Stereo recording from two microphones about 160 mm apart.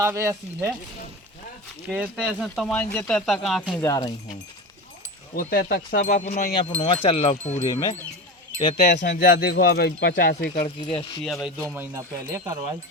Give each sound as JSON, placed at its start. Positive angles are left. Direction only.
{"t": 0.0, "sound": "speech", "side_deg": -15}
{"t": 1.9, "sound": "speech", "side_deg": -10}
{"t": 3.8, "sound": "speech", "side_deg": 25}
{"t": 5.3, "sound": "speech", "side_deg": 65}
{"t": 6.6, "sound": "speech", "side_deg": 35}
{"t": 7.7, "sound": "speech", "side_deg": 20}
{"t": 9.0, "sound": "speech", "side_deg": 70}
{"t": 10.9, "sound": "speech", "side_deg": 0}
{"t": 11.7, "sound": "speech", "side_deg": -15}